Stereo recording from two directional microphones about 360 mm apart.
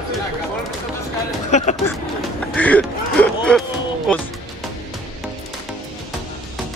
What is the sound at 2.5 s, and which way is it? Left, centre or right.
Speech, centre.